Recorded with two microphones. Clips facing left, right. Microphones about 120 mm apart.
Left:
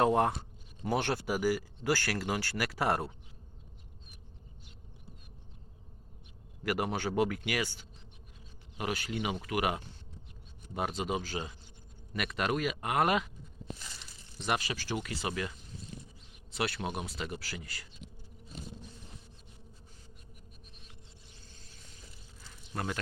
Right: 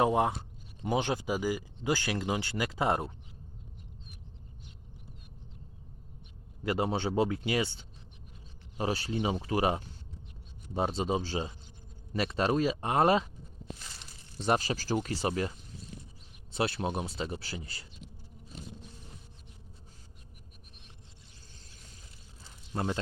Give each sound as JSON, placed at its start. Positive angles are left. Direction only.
{"t": 0.0, "sound": "speech", "side_deg": -10}
{"t": 6.6, "sound": "speech", "side_deg": -25}
{"t": 14.3, "sound": "speech", "side_deg": -35}
{"t": 16.6, "sound": "speech", "side_deg": -30}
{"t": 22.4, "sound": "snake", "side_deg": -25}